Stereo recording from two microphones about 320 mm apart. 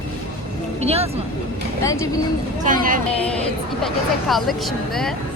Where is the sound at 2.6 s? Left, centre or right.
Right.